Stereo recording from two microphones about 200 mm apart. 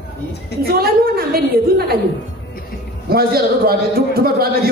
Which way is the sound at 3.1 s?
50° right (ahead or behind).